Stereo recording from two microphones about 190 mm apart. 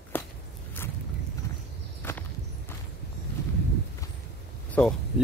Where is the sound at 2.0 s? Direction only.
10° left (ahead or behind).